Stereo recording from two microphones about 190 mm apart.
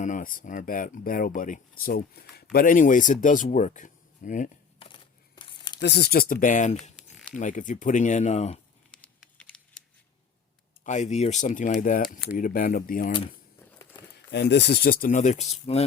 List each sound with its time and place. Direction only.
0.0 s speech: 45° left (ahead or behind)
4.9 s tearing: 25° left (ahead or behind)
5.8 s speech: 60° left (ahead or behind); by 6.7 s 40° left (ahead or behind)
6.9 s a sound: centre (ahead or behind)
7.3 s speech: 40° left (ahead or behind)
8.9 s crumpling: 5° left (ahead or behind)
9.4 s scissors: 5° left (ahead or behind)
10.8 s speech: 40° left (ahead or behind)
13.7 s a sound: 10° left (ahead or behind)
14.3 s speech: 65° left (ahead or behind); by 15.5 s 40° left (ahead or behind)